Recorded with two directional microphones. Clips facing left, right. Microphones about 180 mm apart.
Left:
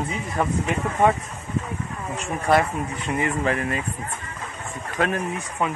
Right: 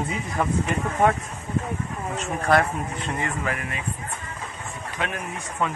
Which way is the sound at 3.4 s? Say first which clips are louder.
Left 6 dB; 35° left (ahead or behind).